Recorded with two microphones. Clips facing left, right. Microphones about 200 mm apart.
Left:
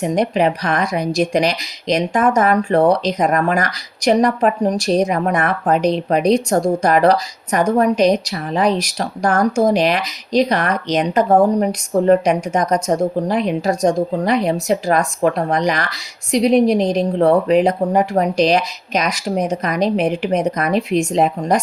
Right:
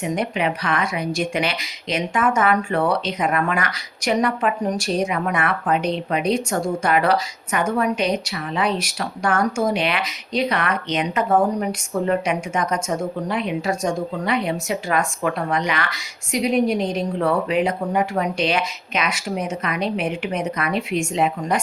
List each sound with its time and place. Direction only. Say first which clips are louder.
0.0 s speech: left 6 dB; 35° left (ahead or behind)